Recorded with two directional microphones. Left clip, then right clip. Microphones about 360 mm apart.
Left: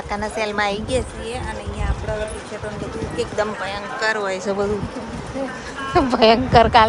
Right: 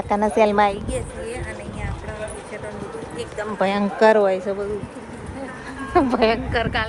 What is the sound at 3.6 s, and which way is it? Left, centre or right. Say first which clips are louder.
A woman's voice: right 6 dB; centre.